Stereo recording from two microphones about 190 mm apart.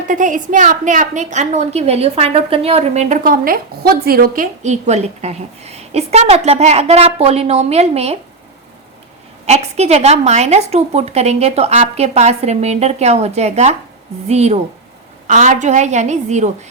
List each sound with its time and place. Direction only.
0.1 s a woman's voice: 45° right (ahead or behind)
9.5 s a woman's voice: 35° right (ahead or behind)